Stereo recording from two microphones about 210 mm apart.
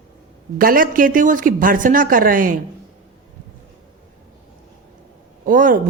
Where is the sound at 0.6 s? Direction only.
40° right (ahead or behind).